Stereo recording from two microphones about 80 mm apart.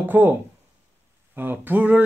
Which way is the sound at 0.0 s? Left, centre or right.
Right.